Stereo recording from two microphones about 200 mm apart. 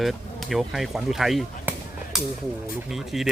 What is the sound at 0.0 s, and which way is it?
Speech, centre (ahead or behind).